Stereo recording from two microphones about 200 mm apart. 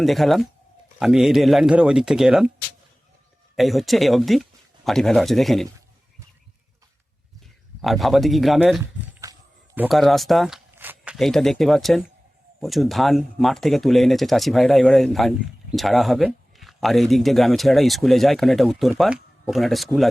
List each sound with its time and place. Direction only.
0.0 s speech: centre (ahead or behind)
3.5 s speech: centre (ahead or behind)
7.8 s speech: centre (ahead or behind)
9.2 s a sound: 15° right (ahead or behind)
9.7 s speech: 5° right (ahead or behind)